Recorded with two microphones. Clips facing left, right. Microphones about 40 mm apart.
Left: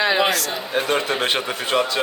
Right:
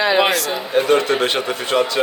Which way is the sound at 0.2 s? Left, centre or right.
Centre.